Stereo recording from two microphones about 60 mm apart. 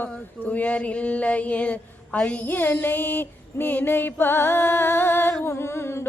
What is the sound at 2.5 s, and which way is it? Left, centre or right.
Female singing, left.